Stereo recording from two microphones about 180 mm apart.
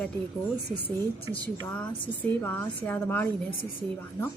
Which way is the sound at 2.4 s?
10° left (ahead or behind).